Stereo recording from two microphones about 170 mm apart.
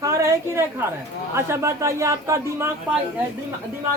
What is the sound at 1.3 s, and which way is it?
A woman's voice, 15° right (ahead or behind).